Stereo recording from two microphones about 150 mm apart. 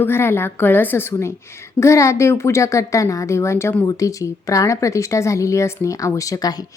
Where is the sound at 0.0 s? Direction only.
15° left (ahead or behind).